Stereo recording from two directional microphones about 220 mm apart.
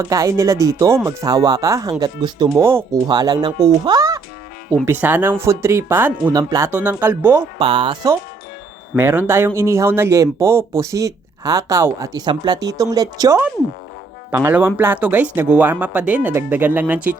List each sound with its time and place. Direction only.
0.0 s speech: 15° right (ahead or behind)
7.6 s speech: 25° right (ahead or behind)
9.0 s speech: 10° right (ahead or behind)